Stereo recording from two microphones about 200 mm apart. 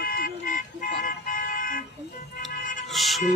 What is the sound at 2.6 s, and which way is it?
Music, 40° left (ahead or behind).